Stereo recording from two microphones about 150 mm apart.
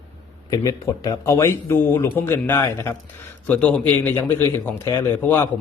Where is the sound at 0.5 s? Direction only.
25° left (ahead or behind).